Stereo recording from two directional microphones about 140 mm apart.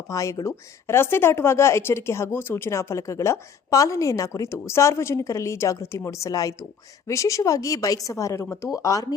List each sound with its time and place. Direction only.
0.1 s a woman's voice: 25° left (ahead or behind)